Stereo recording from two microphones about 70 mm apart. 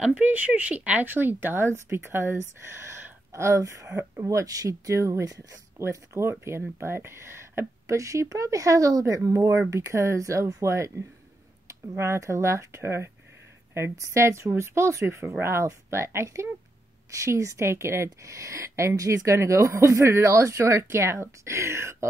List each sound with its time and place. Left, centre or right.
0.2 s speech: right
5.8 s speech: right
7.8 s speech: right